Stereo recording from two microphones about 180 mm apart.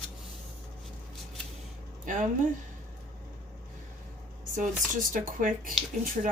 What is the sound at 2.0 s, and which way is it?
Speech, 45° right (ahead or behind).